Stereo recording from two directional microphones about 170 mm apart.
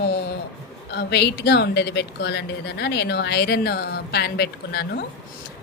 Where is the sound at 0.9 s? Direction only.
80° left.